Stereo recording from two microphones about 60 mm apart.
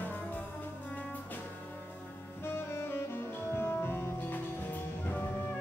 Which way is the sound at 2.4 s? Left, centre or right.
Left.